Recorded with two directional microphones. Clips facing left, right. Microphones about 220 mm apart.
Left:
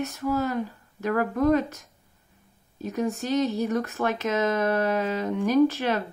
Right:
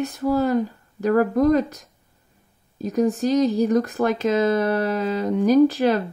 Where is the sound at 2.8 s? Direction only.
35° right (ahead or behind).